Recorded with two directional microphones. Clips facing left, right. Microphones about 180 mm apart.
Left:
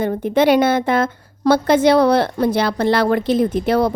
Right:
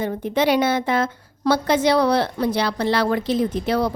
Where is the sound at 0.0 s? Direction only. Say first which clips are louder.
Left 5 dB; 55° left (ahead or behind).